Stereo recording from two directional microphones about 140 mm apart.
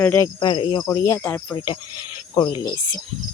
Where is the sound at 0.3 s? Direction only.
35° left (ahead or behind).